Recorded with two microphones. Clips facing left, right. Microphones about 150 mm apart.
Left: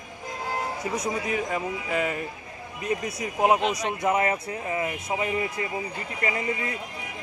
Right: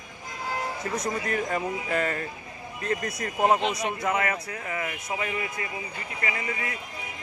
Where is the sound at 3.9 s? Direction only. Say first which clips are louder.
Left 3 dB; 25° left (ahead or behind).